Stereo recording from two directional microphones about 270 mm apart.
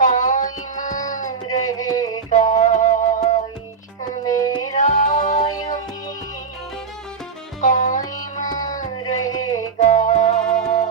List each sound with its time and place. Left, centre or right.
0.0 s music: left
1.3 s music: centre
2.3 s music: left
4.2 s music: centre
4.8 s music: left
5.5 s music: centre
7.6 s music: left
8.0 s music: centre
9.0 s a sound: centre
9.7 s music: left